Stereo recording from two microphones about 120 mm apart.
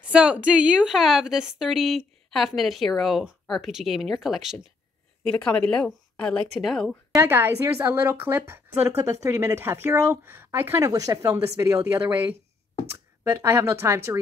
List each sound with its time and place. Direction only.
0.0 s a woman's voice: 10° right (ahead or behind)
5.2 s speech: 10° left (ahead or behind)
7.2 s a woman's voice: 20° right (ahead or behind)
10.9 s a woman's voice: 30° right (ahead or behind)